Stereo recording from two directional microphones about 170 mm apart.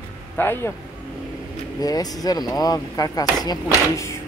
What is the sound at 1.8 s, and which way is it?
Speech, 20° left (ahead or behind).